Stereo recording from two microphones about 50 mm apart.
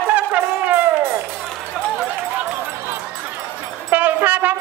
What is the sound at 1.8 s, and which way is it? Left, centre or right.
Run, right.